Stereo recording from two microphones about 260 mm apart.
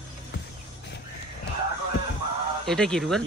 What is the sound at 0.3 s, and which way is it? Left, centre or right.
Music, left.